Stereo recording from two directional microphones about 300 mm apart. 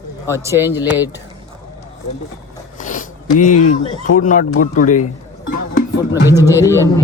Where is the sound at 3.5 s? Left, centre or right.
Left.